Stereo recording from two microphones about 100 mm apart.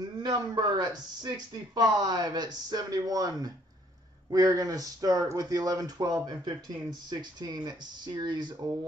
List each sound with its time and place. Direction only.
0.0 s speech: 45° right (ahead or behind)